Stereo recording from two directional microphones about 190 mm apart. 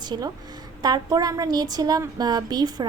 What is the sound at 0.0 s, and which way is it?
A woman's voice, 20° right (ahead or behind).